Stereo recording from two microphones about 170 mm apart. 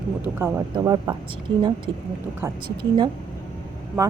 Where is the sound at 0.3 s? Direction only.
15° right (ahead or behind).